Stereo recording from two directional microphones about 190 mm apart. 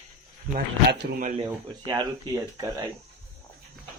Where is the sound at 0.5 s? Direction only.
60° right (ahead or behind).